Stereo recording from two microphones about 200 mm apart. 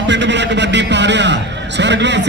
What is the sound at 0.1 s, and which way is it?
A man's voice, 60° right (ahead or behind).